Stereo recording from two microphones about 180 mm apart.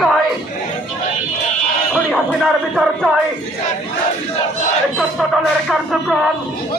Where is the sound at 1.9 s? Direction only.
Centre (ahead or behind).